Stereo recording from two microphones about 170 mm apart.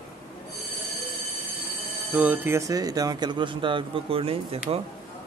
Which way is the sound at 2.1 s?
10° right (ahead or behind).